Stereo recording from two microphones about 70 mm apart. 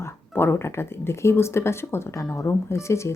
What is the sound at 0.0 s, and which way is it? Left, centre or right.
A woman's voice, left.